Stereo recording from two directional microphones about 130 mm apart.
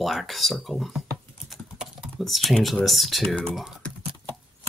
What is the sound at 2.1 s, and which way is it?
Speech, centre (ahead or behind).